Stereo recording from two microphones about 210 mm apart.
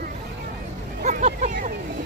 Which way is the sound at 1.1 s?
35° right (ahead or behind).